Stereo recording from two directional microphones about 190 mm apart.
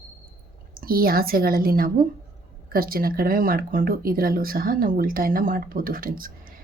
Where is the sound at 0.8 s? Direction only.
50° right (ahead or behind).